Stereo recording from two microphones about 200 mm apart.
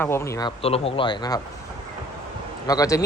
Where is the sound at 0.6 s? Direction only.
30° left (ahead or behind).